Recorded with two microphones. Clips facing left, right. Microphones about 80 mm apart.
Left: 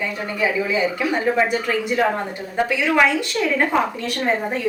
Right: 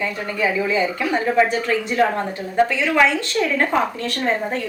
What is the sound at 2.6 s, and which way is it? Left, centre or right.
Speech, centre.